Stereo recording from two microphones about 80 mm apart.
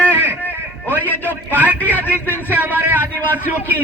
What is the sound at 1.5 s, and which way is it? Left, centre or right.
Speech, centre.